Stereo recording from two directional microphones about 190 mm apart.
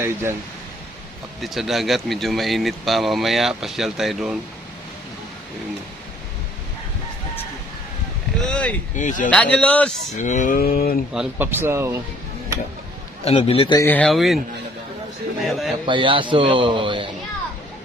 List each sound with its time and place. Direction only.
0.0 s speech: 15° right (ahead or behind)
1.4 s speech: centre (ahead or behind)
8.4 s speech: 5° left (ahead or behind)
9.0 s speech: 40° left (ahead or behind)
9.3 s a man's voice: 5° left (ahead or behind)
10.2 s speech: 40° left (ahead or behind)
11.1 s speech: 5° right (ahead or behind)
13.2 s a man's voice: 30° left (ahead or behind)
13.7 s speech: 10° left (ahead or behind)
15.9 s a man's voice: 25° right (ahead or behind)